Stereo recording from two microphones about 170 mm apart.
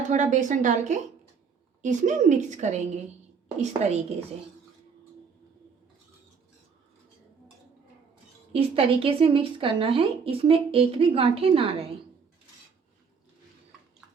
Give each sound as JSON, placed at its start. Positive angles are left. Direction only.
{"t": 0.1, "sound": "a woman's voice", "side_deg": -45}
{"t": 8.5, "sound": "speech", "side_deg": -35}